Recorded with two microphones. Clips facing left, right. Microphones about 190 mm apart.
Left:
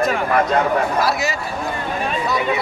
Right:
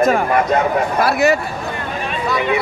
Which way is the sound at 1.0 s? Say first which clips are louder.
Right 6 dB; 60° right (ahead or behind).